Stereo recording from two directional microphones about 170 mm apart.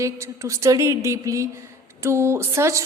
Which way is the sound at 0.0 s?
15° right (ahead or behind).